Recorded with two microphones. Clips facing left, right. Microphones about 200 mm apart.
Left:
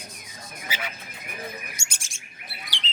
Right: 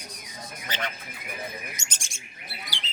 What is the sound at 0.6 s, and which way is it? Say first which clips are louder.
Neigh: right 2 dB; 5° left (ahead or behind).